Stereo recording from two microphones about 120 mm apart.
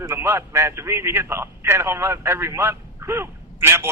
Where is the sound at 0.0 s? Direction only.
20° right (ahead or behind).